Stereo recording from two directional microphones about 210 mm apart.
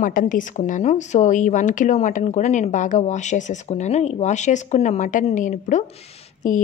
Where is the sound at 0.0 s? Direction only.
40° left (ahead or behind).